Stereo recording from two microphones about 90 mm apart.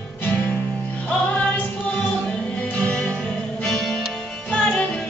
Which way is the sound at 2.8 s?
15° left (ahead or behind).